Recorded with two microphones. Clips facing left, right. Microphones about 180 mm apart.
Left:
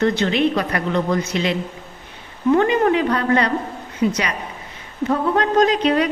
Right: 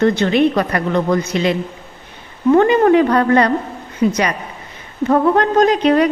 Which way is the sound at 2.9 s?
50° right (ahead or behind).